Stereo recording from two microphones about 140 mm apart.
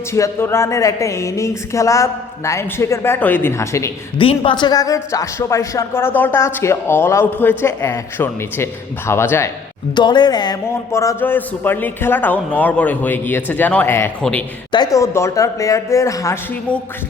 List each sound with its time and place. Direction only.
0.1 s speech: 20° left (ahead or behind)
4.2 s a man's voice: 40° left (ahead or behind); by 9.5 s 15° left (ahead or behind)
9.9 s a man's voice: 30° left (ahead or behind)
14.2 s a man's voice: 5° left (ahead or behind)
14.7 s speech: 25° left (ahead or behind)